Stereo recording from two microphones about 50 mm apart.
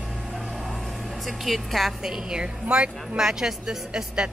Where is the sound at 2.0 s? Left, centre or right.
Centre.